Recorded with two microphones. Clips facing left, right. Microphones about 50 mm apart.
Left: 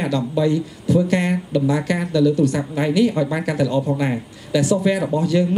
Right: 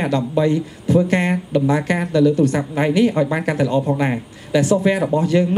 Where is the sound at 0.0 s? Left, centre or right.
Right.